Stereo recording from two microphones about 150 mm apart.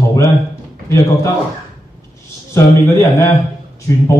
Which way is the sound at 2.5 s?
15° left (ahead or behind).